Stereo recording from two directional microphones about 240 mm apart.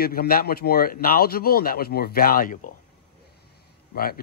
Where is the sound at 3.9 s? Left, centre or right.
Left.